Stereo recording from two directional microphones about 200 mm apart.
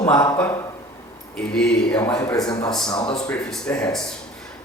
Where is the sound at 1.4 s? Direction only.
5° left (ahead or behind).